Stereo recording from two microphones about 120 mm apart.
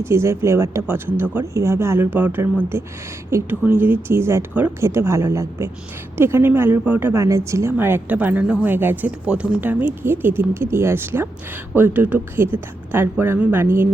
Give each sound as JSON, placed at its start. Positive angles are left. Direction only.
{"t": 0.0, "sound": "a woman's voice", "side_deg": -20}